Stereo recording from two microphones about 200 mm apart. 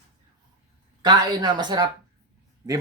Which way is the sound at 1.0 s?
20° right (ahead or behind).